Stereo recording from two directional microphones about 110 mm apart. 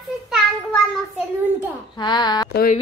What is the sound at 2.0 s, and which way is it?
Speech, 40° left (ahead or behind).